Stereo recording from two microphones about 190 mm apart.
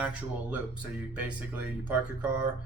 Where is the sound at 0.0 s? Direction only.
5° right (ahead or behind).